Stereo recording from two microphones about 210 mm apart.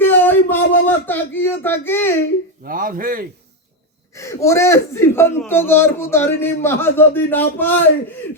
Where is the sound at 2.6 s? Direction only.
40° right (ahead or behind).